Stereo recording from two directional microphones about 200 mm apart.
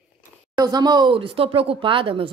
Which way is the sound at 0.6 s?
20° right (ahead or behind).